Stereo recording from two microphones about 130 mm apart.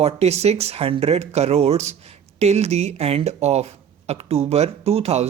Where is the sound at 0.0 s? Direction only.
55° right (ahead or behind).